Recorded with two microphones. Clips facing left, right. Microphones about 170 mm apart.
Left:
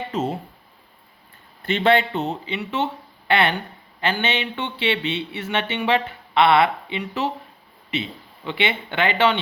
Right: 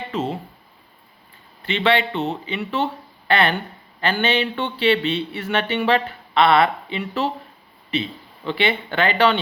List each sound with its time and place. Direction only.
0.1 s speech: 45° left (ahead or behind)
1.6 s a man's voice: 45° left (ahead or behind)
2.6 s speech: 20° left (ahead or behind)
8.4 s speech: 20° left (ahead or behind)